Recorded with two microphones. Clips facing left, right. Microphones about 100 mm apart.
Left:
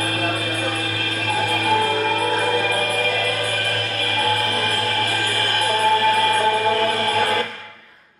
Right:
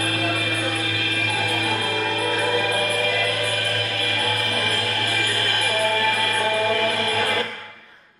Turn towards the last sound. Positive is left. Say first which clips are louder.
# left 3 dB
turn(degrees=40)  # may be behind; listen again after turning